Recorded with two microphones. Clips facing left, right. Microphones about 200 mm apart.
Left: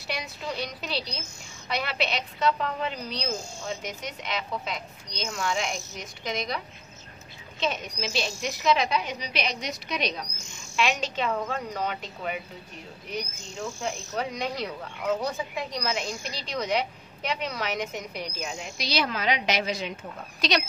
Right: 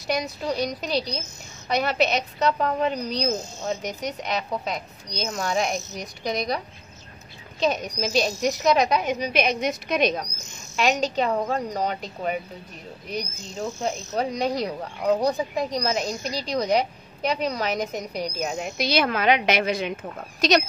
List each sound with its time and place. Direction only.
0.0 s speech: 40° right (ahead or behind)
7.6 s speech: 40° right (ahead or behind)
10.8 s speech: 40° right (ahead or behind)
18.6 s a woman's voice: 55° right (ahead or behind)
20.3 s speech: 45° right (ahead or behind)